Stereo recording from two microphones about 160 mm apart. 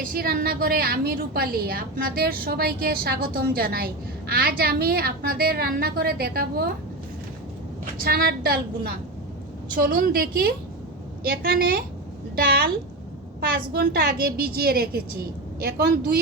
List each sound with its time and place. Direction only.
0.0 s a woman's voice: 65° right (ahead or behind)
8.0 s a woman's voice: 80° right
9.7 s a woman's voice: 65° right (ahead or behind)
15.6 s a woman's voice: 85° right